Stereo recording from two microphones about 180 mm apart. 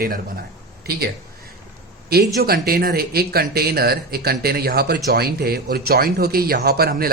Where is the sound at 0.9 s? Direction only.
60° right (ahead or behind).